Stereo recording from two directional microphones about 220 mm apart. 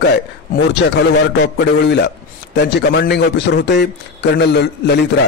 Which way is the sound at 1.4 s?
50° left (ahead or behind).